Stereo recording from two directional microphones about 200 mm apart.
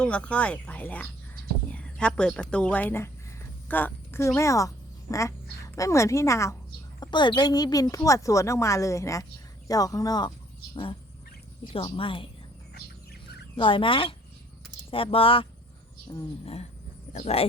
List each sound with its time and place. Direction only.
0.0 s a woman's voice: 5° left (ahead or behind)
11.7 s speech: 25° left (ahead or behind)
13.6 s speech: 25° left (ahead or behind)
17.1 s speech: 35° left (ahead or behind)